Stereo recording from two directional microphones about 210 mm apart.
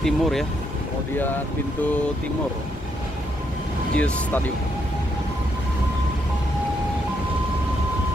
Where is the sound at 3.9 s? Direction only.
5° left (ahead or behind).